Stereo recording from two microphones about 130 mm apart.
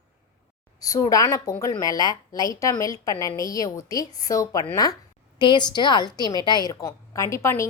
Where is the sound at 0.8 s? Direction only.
25° left (ahead or behind).